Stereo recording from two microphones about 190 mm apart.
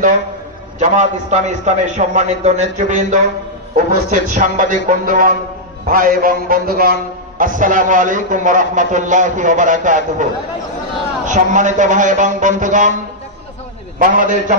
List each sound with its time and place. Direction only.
1.3 s a man's voice: 40° right (ahead or behind)
11.2 s a man's voice: 40° right (ahead or behind)
13.9 s a man's voice: 45° right (ahead or behind)